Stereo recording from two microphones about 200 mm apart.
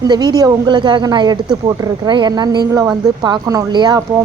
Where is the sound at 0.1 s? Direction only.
20° right (ahead or behind).